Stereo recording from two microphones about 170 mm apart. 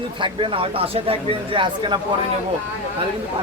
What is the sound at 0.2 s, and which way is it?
Speech, 30° right (ahead or behind).